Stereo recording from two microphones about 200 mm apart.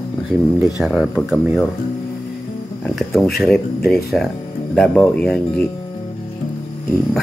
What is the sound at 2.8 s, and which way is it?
Speech, centre (ahead or behind).